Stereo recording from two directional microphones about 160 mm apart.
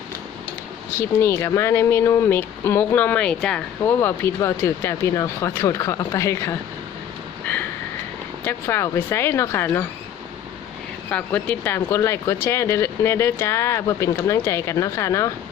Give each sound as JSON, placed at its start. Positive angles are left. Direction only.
{"t": 0.9, "sound": "speech", "side_deg": 15}
{"t": 8.4, "sound": "speech", "side_deg": 15}
{"t": 11.1, "sound": "speech", "side_deg": 10}